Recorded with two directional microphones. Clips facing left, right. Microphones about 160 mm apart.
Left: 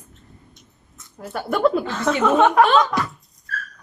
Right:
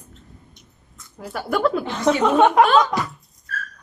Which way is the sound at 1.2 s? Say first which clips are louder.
Left 2 dB; centre (ahead or behind).